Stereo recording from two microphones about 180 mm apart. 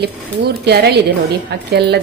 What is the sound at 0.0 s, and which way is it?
Speech, 65° right (ahead or behind).